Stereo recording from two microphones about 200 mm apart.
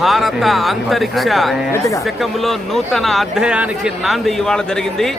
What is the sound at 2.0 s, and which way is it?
Speech, centre (ahead or behind).